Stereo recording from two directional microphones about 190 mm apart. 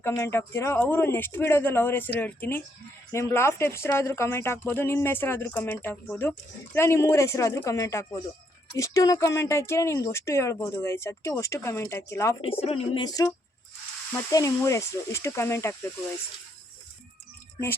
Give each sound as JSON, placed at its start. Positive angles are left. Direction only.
{"t": 0.0, "sound": "speech", "side_deg": 15}
{"t": 12.4, "sound": "speech", "side_deg": 30}